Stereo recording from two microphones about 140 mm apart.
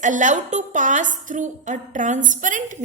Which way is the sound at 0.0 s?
65° right (ahead or behind).